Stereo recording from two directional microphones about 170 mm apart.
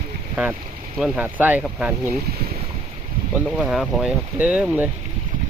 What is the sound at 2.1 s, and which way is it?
Speech, 65° right (ahead or behind).